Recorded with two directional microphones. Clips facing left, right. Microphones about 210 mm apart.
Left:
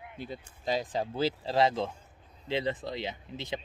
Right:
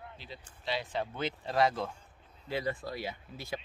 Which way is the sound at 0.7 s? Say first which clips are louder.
Left 4 dB; 40° left (ahead or behind).